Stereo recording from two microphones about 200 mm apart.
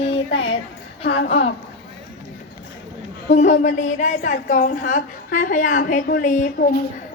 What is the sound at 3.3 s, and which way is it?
A woman's voice, 35° left (ahead or behind).